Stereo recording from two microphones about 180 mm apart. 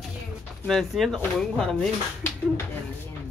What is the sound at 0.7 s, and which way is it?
Speech, centre (ahead or behind).